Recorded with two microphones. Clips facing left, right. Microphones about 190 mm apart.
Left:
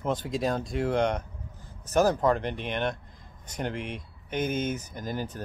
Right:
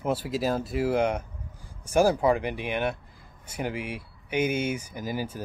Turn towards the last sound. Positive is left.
turn(degrees=-10)  # may be behind; listen again after turning